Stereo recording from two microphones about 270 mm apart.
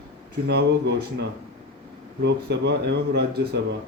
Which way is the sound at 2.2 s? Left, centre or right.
Right.